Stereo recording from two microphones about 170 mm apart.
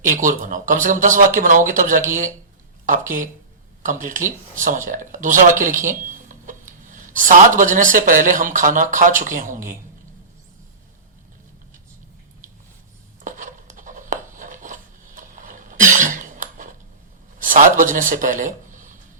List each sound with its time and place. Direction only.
0.0 s speech: 50° right (ahead or behind)
13.2 s a sound: 50° right (ahead or behind)
17.4 s speech: 55° right (ahead or behind)